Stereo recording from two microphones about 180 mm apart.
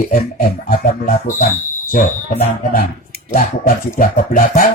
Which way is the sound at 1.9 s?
50° left (ahead or behind).